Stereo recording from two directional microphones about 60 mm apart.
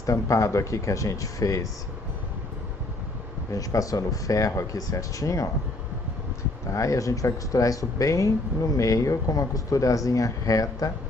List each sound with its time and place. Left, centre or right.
0.0 s speech: left
3.5 s speech: left
6.7 s speech: left